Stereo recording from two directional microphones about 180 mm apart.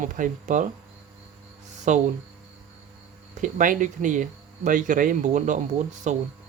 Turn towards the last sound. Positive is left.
turn(degrees=-40)  # may be behind; listen again after turning